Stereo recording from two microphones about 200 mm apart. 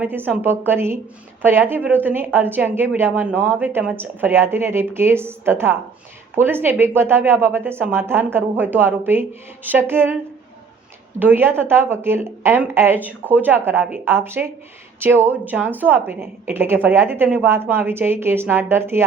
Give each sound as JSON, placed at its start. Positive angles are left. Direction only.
{"t": 0.0, "sound": "speech", "side_deg": -10}
{"t": 11.2, "sound": "speech", "side_deg": -10}